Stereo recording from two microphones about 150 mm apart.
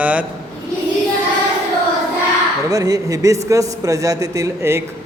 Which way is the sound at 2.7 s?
25° right (ahead or behind).